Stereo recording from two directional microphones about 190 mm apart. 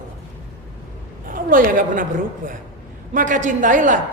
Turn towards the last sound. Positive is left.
turn(degrees=-45)  # may be behind; listen again after turning